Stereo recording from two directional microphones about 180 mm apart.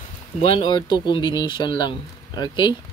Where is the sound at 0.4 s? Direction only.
30° left (ahead or behind).